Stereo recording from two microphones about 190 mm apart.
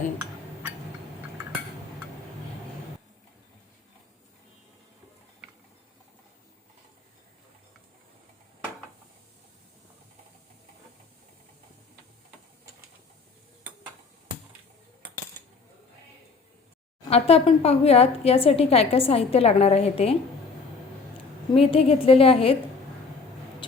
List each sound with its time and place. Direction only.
17.1 s a woman's voice: 30° left (ahead or behind)
21.5 s a woman's voice: 30° left (ahead or behind)